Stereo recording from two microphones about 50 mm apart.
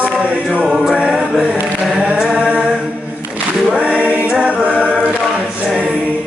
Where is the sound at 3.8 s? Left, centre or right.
Right.